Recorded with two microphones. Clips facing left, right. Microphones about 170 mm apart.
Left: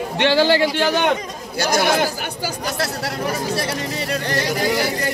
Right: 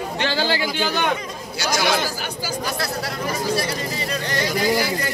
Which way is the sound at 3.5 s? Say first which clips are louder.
Left 1 dB; 65° left (ahead or behind).